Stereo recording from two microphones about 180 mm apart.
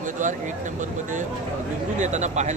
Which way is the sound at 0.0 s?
45° right (ahead or behind).